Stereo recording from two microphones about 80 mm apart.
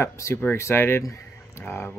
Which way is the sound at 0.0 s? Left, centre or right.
Left.